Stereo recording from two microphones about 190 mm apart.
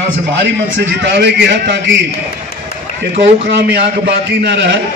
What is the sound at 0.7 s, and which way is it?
A man's voice, 70° right (ahead or behind).